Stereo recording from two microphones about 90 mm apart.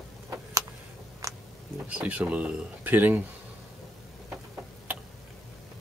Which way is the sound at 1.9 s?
15° right (ahead or behind).